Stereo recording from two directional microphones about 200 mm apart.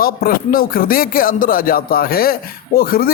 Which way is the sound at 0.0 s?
45° left (ahead or behind).